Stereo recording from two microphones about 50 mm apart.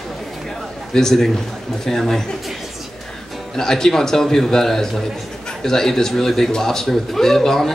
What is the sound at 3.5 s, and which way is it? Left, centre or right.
A man's voice, centre.